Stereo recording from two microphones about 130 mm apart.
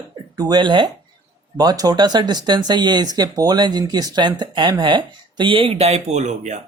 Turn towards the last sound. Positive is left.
turn(degrees=-65)  # may be behind; listen again after turning